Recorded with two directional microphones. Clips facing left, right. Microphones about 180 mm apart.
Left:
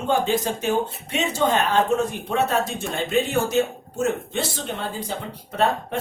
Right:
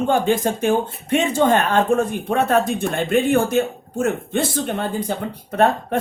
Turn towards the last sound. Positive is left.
turn(degrees=-55)  # may be behind; listen again after turning